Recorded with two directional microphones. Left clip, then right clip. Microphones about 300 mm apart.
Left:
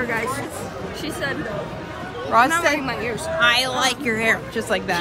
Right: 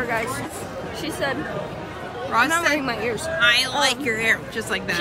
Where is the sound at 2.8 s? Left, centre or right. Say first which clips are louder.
Right 1 dB; centre.